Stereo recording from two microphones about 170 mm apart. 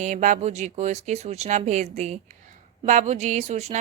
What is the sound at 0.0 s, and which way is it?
Speech, 45° right (ahead or behind).